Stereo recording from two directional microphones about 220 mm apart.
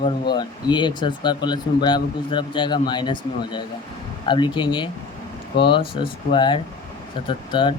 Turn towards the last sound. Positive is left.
turn(degrees=20)  # may be behind; listen again after turning